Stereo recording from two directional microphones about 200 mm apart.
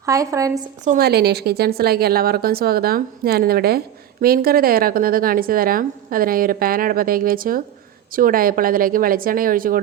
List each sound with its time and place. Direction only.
0.0 s a woman's voice: 15° right (ahead or behind)
0.9 s a woman's voice: 50° right (ahead or behind)